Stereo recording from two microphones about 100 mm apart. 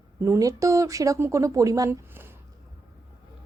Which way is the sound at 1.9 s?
20° right (ahead or behind).